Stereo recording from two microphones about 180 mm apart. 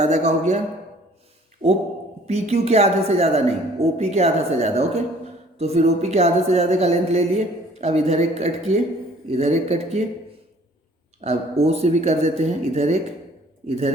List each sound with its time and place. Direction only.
0.0 s a woman's voice: 40° right (ahead or behind)
1.6 s a man's voice: 30° right (ahead or behind)
11.2 s a woman's voice: 35° right (ahead or behind)